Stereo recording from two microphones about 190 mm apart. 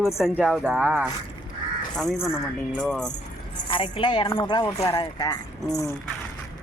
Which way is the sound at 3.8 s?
25° left (ahead or behind).